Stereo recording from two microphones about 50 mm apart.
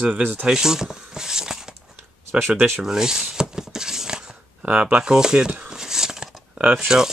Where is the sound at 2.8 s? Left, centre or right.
Centre.